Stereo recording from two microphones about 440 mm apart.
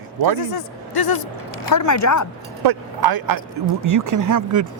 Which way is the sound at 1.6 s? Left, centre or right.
Left.